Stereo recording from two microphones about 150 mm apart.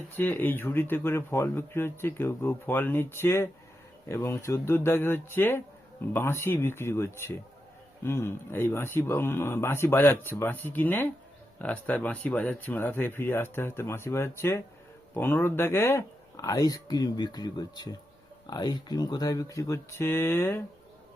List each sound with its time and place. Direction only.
0.2 s speech: 15° left (ahead or behind)